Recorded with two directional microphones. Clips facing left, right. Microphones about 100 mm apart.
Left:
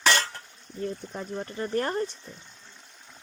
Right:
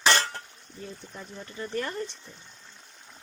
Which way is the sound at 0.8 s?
55° left (ahead or behind).